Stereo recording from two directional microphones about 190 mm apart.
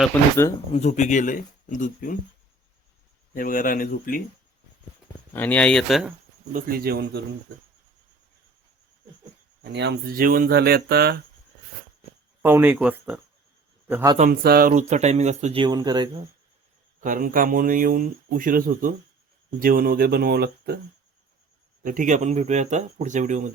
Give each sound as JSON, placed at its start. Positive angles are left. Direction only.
{"t": 0.1, "sound": "speech", "side_deg": 15}
{"t": 0.7, "sound": "speech", "side_deg": 35}
{"t": 3.3, "sound": "speech", "side_deg": 45}
{"t": 5.3, "sound": "speech", "side_deg": 10}
{"t": 6.5, "sound": "speech", "side_deg": -50}
{"t": 9.7, "sound": "speech", "side_deg": -60}
{"t": 12.4, "sound": "a man's voice", "side_deg": -10}
{"t": 14.2, "sound": "speech", "side_deg": -50}
{"t": 14.7, "sound": "speech", "side_deg": -40}
{"t": 15.6, "sound": "speech", "side_deg": -20}
{"t": 17.0, "sound": "speech", "side_deg": -45}
{"t": 21.8, "sound": "speech", "side_deg": -45}